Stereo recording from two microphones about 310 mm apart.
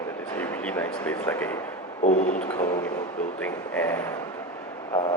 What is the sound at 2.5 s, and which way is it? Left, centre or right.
Speech, centre.